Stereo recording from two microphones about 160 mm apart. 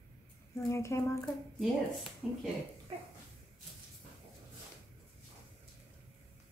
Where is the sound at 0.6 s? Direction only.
20° left (ahead or behind).